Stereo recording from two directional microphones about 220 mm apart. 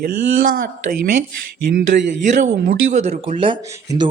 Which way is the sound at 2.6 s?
30° right (ahead or behind).